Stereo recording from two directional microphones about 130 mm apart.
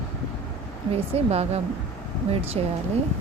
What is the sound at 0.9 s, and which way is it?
Speech, 50° right (ahead or behind).